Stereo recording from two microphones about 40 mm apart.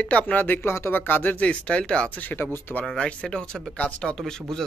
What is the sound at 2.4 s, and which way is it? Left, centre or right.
Speech, left.